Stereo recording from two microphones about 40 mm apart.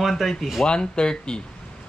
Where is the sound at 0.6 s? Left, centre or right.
Left.